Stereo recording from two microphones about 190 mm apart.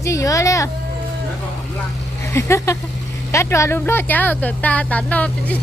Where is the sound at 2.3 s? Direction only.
15° left (ahead or behind).